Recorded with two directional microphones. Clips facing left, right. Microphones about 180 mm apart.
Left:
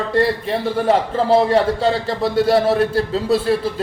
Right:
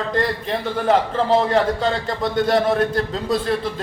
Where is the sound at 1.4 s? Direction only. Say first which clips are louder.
Left 3 dB; 35° left (ahead or behind).